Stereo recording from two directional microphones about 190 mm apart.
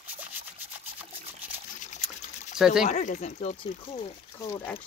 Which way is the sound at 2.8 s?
40° left (ahead or behind).